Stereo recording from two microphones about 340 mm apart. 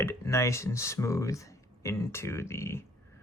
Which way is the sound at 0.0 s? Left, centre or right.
Centre.